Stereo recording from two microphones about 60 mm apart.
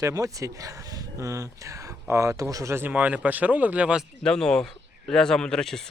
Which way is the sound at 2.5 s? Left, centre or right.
Right.